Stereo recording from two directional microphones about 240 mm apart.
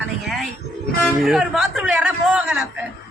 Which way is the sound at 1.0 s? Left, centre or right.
Centre.